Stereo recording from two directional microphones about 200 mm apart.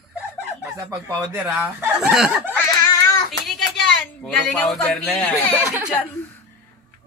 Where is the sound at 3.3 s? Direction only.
Centre (ahead or behind).